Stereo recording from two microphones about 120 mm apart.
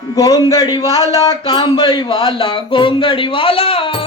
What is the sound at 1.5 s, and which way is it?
Speech, 50° left (ahead or behind).